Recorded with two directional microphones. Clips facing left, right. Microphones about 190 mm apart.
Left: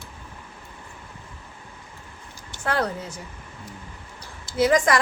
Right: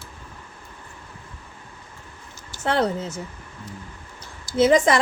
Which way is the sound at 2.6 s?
25° right (ahead or behind).